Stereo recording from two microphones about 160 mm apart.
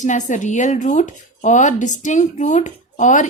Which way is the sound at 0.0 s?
50° left (ahead or behind).